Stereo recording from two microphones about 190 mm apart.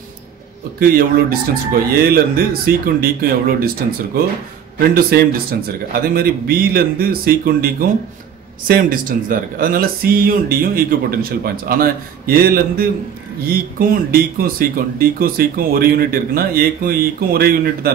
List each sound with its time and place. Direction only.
0.7 s speech: 50° right (ahead or behind)